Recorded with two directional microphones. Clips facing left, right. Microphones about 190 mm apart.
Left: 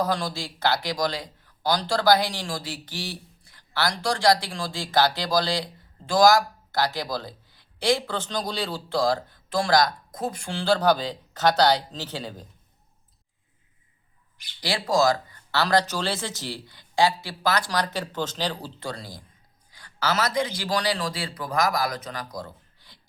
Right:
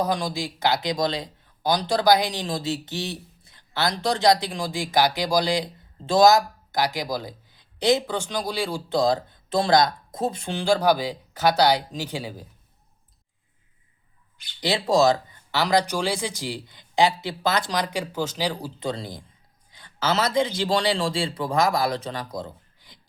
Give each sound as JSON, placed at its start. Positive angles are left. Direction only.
{"t": 0.0, "sound": "speech", "side_deg": -15}
{"t": 14.6, "sound": "a man's voice", "side_deg": -25}